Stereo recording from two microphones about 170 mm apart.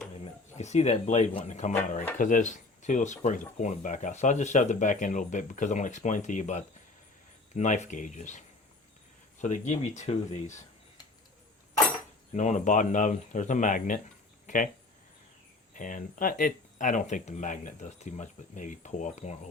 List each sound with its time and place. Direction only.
0.5 s speech: 40° left (ahead or behind)
12.3 s speech: 45° left (ahead or behind)
14.4 s a sound: 50° left (ahead or behind)
15.7 s speech: 50° left (ahead or behind)